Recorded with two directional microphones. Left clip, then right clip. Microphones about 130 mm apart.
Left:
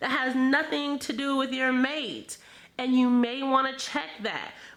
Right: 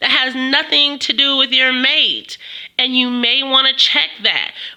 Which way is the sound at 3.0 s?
30° right (ahead or behind).